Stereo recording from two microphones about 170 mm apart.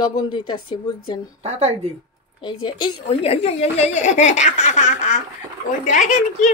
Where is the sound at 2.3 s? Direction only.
25° left (ahead or behind); by 6.2 s 45° left (ahead or behind).